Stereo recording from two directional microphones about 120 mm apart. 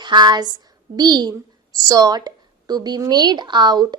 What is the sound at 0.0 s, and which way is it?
A woman's voice, 35° right (ahead or behind).